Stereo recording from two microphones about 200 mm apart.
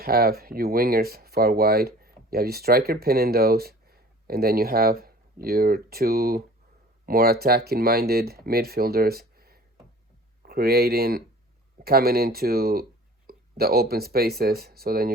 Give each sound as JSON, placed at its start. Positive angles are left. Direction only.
{"t": 0.0, "sound": "speech", "side_deg": -50}